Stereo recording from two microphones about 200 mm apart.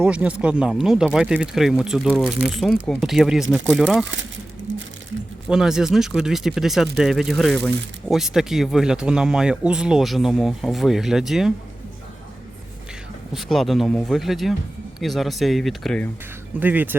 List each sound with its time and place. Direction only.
0.0 s speech: 5° right (ahead or behind)
4.0 s speech: 70° right (ahead or behind)
4.7 s crumpling: 70° right (ahead or behind)
5.5 s speech: 5° right (ahead or behind)
13.3 s speech: centre (ahead or behind)
16.6 s speech: 10° right (ahead or behind)